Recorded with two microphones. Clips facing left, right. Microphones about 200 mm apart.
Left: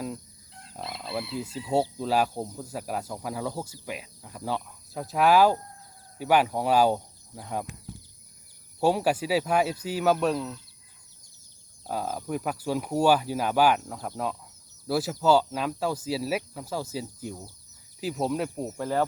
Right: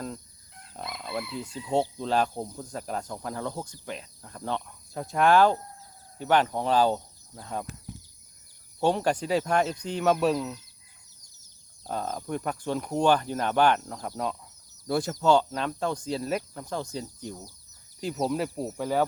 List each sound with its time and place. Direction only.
0.9 s a sound: 30° left (ahead or behind)
1.5 s speech: 5° left (ahead or behind)
8.8 s speech: 5° left (ahead or behind)
11.9 s speech: 5° left (ahead or behind)